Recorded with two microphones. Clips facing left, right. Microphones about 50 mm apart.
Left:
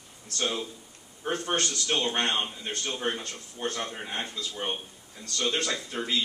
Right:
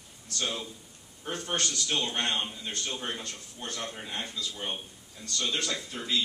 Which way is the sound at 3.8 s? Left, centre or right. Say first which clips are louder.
Left 2 dB; left.